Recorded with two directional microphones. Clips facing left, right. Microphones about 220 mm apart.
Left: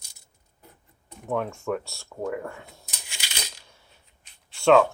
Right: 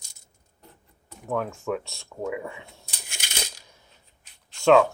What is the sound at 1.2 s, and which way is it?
Speech, centre (ahead or behind).